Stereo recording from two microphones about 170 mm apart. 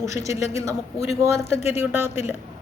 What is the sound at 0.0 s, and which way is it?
Speech, 20° right (ahead or behind).